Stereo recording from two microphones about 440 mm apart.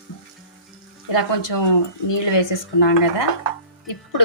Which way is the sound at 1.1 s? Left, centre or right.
Left.